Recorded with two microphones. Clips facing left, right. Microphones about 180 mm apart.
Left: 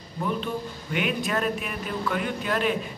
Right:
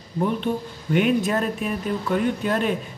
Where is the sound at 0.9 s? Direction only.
40° right (ahead or behind).